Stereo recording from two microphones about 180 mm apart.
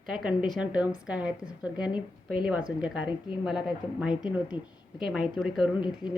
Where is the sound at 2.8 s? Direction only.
5° right (ahead or behind).